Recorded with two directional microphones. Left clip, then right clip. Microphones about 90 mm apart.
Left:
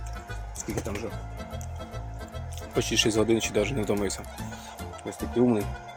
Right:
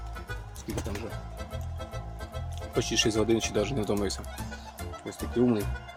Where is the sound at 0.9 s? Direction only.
Centre (ahead or behind).